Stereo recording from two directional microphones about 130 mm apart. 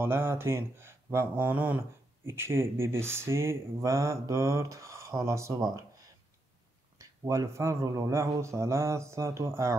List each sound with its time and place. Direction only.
0.0 s speech: 20° right (ahead or behind)
7.0 s speech: 25° right (ahead or behind)